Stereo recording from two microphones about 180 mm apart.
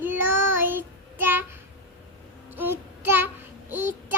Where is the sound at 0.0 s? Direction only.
10° right (ahead or behind).